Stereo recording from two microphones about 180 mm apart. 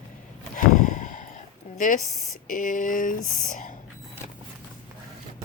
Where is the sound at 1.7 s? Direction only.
45° left (ahead or behind).